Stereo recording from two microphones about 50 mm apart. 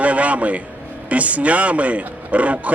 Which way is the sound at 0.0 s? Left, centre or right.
Right.